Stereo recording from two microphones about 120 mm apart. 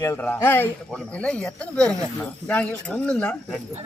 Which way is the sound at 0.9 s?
10° left (ahead or behind).